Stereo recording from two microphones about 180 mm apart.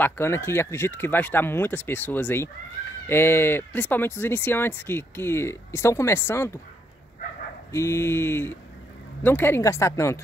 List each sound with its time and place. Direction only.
0.0 s speech: 15° left (ahead or behind)
7.7 s speech: 15° left (ahead or behind)